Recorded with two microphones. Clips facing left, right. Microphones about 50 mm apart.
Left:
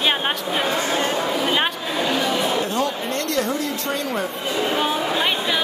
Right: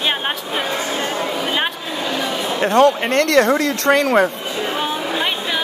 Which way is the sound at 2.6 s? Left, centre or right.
Right.